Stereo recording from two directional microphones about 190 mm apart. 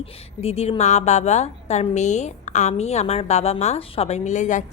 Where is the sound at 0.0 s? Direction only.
30° left (ahead or behind).